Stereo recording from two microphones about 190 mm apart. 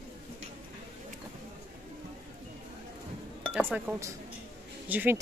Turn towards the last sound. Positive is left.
turn(degrees=-10)  # may be behind; listen again after turning